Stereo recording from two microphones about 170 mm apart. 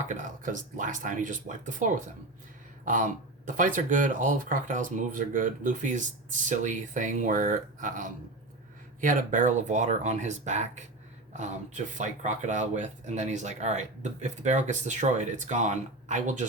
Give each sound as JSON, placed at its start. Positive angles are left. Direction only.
{"t": 0.0, "sound": "speech", "side_deg": -45}